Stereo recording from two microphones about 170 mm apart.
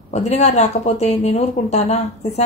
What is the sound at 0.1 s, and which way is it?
A woman's voice, 40° left (ahead or behind).